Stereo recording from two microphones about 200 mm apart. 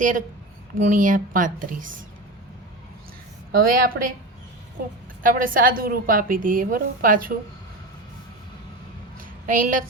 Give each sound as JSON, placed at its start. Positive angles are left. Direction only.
{"t": 0.0, "sound": "speech", "side_deg": -40}
{"t": 3.7, "sound": "a woman's voice", "side_deg": -45}
{"t": 5.2, "sound": "a woman's voice", "side_deg": -45}
{"t": 9.5, "sound": "speech", "side_deg": -40}